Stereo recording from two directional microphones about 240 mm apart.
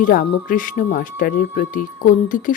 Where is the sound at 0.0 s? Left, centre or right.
Left.